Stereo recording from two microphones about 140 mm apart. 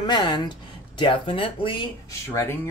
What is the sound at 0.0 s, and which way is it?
Speech, 30° left (ahead or behind).